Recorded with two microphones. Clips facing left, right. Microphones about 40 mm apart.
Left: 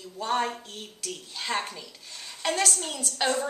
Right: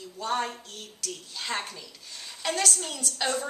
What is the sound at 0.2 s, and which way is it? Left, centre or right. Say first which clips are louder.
A woman's voice: left 2 dB; centre.